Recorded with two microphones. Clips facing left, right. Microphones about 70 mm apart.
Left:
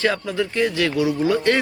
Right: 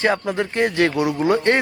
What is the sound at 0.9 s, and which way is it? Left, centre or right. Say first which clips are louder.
Speech: even; right.